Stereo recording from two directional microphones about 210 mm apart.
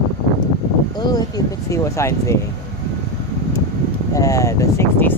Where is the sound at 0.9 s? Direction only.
20° left (ahead or behind).